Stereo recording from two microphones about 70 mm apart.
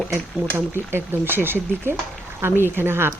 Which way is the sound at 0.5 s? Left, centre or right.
Right.